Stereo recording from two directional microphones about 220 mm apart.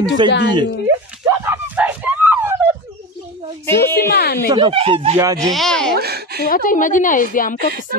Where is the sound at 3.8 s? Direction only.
45° left (ahead or behind).